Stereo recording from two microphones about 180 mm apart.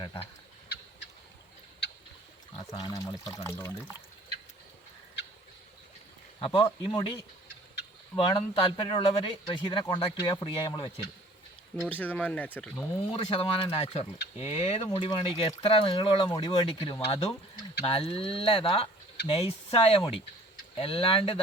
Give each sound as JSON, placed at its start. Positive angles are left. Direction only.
{"t": 2.6, "sound": "speech", "side_deg": 20}
{"t": 6.4, "sound": "speech", "side_deg": 25}
{"t": 8.3, "sound": "speech", "side_deg": 30}
{"t": 11.8, "sound": "speech", "side_deg": 10}
{"t": 13.1, "sound": "speech", "side_deg": 30}